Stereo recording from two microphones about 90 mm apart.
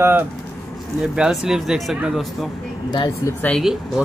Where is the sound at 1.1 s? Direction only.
5° right (ahead or behind).